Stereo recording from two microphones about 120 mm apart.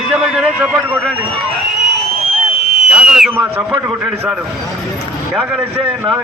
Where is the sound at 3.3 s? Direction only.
15° right (ahead or behind).